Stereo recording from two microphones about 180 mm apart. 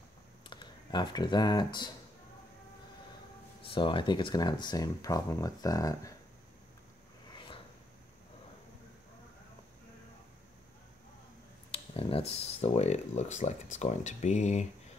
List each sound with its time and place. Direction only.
0.4 s speech: 25° left (ahead or behind)
3.6 s speech: 30° left (ahead or behind)
7.3 s a sound: 25° left (ahead or behind)
11.7 s speech: 30° left (ahead or behind)